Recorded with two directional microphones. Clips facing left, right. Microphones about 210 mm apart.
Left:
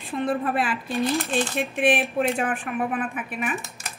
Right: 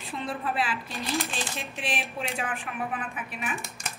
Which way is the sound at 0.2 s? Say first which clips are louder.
Left 7 dB; 50° left (ahead or behind).